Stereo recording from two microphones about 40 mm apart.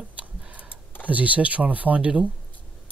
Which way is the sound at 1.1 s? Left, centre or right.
Right.